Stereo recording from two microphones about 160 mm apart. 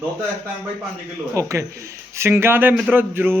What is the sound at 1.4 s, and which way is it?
A man's voice, 20° right (ahead or behind).